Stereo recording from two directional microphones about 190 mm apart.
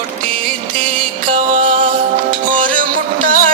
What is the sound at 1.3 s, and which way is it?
Music, 45° right (ahead or behind).